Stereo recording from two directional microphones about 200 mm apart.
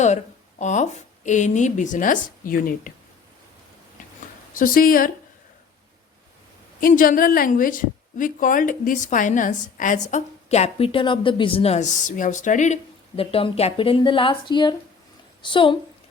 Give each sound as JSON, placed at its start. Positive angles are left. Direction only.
{"t": 0.6, "sound": "a woman's voice", "side_deg": 35}
{"t": 4.5, "sound": "speech", "side_deg": 45}
{"t": 6.7, "sound": "a woman's voice", "side_deg": 45}